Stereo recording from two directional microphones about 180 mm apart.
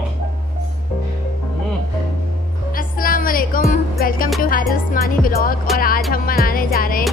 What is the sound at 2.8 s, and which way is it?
Music, 50° left (ahead or behind).